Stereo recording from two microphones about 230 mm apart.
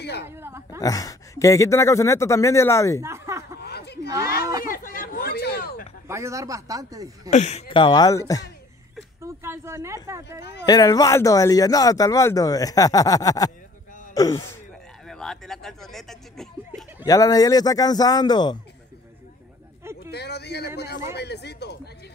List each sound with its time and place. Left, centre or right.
0.3 s speech: centre
0.7 s speech: centre
3.0 s a sound: centre
3.5 s chatter: left
4.6 s a sound: left
6.0 s speech: centre
7.2 s speech: left; by 8.5 s centre
9.2 s speech: centre
10.6 s speech: centre
15.0 s speech: centre
17.0 s speech: centre
20.1 s speech: left